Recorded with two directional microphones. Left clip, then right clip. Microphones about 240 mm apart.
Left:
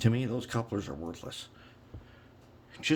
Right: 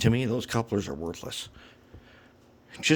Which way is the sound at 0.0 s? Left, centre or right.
Right.